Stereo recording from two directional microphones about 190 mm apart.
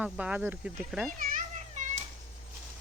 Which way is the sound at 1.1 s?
45° right (ahead or behind).